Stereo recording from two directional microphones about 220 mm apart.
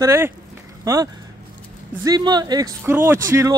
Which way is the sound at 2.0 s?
20° right (ahead or behind).